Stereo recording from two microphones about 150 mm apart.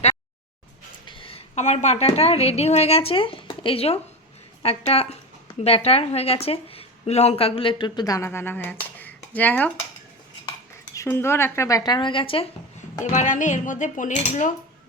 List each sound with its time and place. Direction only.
1.0 s a woman's voice: 35° left (ahead or behind); by 9.7 s 10° left (ahead or behind)
10.9 s speech: 20° left (ahead or behind); by 12.5 s 35° left (ahead or behind)
13.0 s speech: 55° left (ahead or behind)